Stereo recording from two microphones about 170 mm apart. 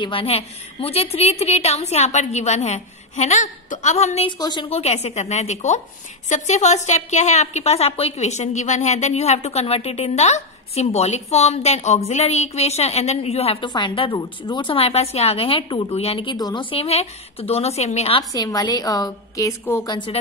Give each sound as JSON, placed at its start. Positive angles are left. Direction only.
{"t": 0.0, "sound": "a woman's voice", "side_deg": 30}
{"t": 4.4, "sound": "a woman's voice", "side_deg": 25}
{"t": 16.7, "sound": "a woman's voice", "side_deg": 35}
{"t": 18.3, "sound": "a woman's voice", "side_deg": 20}
{"t": 19.9, "sound": "a woman's voice", "side_deg": 30}